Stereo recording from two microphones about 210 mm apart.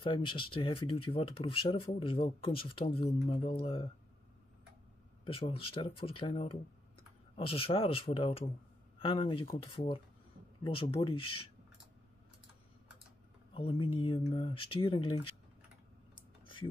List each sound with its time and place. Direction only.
0.0 s speech: 25° left (ahead or behind)
5.2 s speech: 25° left (ahead or behind)
13.5 s speech: 25° left (ahead or behind)